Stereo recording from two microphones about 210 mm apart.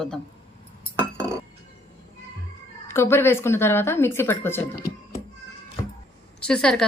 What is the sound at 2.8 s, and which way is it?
A woman's voice, 10° left (ahead or behind).